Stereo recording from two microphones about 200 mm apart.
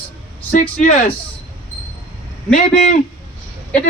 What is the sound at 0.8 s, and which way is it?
Speech, 40° left (ahead or behind).